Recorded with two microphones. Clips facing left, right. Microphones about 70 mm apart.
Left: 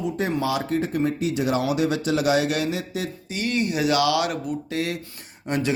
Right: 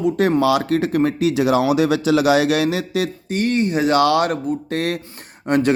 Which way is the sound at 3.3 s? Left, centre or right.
Right.